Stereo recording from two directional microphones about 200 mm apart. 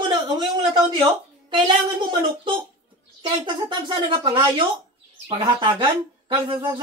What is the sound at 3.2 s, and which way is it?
Speech, 25° right (ahead or behind).